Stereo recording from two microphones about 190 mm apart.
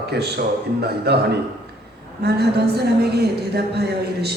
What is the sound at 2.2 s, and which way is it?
A woman's voice, 55° right (ahead or behind).